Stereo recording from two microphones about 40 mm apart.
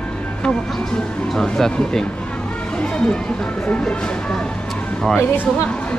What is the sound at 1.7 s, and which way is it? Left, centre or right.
Speech, left.